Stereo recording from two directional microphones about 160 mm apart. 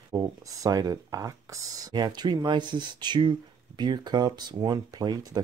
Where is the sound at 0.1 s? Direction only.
20° right (ahead or behind).